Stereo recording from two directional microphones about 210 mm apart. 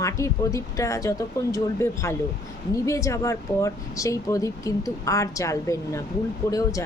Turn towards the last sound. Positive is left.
turn(degrees=15)  # may be behind; listen again after turning